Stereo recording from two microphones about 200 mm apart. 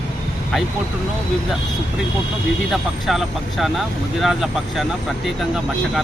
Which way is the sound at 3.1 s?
Centre (ahead or behind).